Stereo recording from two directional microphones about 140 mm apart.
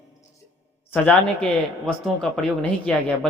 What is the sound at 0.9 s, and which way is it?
Speech, 5° left (ahead or behind).